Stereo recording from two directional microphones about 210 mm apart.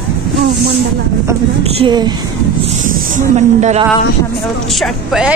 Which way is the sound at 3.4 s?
35° right (ahead or behind).